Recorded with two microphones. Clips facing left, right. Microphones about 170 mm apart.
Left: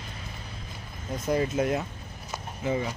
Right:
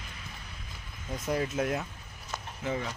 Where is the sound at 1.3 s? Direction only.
Centre (ahead or behind).